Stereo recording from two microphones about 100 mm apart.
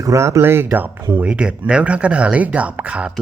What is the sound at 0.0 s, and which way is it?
Speech, 30° right (ahead or behind).